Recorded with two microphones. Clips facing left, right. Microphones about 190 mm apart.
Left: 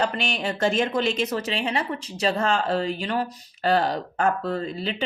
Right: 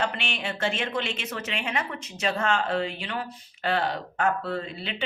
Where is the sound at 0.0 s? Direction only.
40° left (ahead or behind).